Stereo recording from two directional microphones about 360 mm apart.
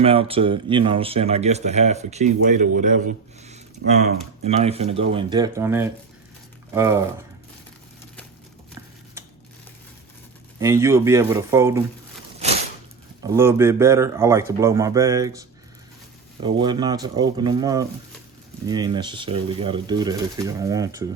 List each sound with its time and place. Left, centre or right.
0.0 s speech: centre
10.6 s speech: centre
13.2 s speech: centre